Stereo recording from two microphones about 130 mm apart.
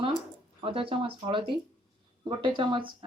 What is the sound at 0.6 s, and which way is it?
Speech, 45° right (ahead or behind).